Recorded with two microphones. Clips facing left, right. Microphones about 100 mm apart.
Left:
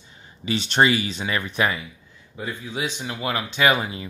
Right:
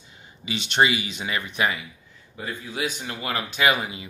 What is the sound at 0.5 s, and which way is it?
Speech, 35° left (ahead or behind).